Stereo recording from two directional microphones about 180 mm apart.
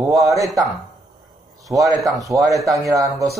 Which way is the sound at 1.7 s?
10° right (ahead or behind).